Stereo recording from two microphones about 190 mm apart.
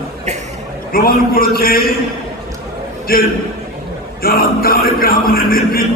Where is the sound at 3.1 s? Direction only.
50° left (ahead or behind).